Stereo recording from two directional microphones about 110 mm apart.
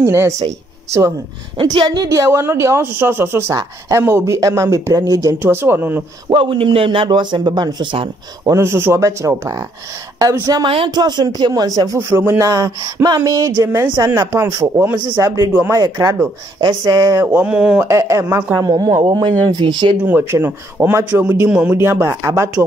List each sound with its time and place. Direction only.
0.0 s a man's voice: 25° right (ahead or behind)
1.6 s a man's voice: 45° right (ahead or behind)
5.4 s a man's voice: 20° right (ahead or behind)
6.2 s speech: 50° right (ahead or behind)
8.5 s a man's voice: 25° right (ahead or behind)
12.0 s a man's voice: 20° right (ahead or behind)
12.4 s a man's voice: 35° right (ahead or behind)
15.1 s speech: 35° right (ahead or behind)
17.3 s speech: 15° right (ahead or behind)
17.8 s a man's voice: 25° right (ahead or behind); by 20.0 s 45° right (ahead or behind)
20.1 s a man's voice: 20° right (ahead or behind)